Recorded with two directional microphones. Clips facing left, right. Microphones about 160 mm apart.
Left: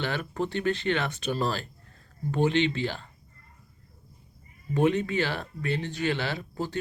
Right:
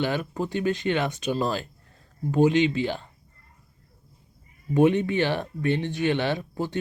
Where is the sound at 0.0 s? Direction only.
15° right (ahead or behind).